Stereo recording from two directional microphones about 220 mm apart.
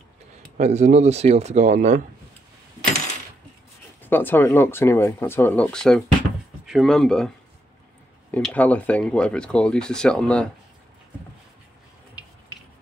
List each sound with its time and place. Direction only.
0.6 s speech: 30° right (ahead or behind)
4.0 s speech: 10° left (ahead or behind)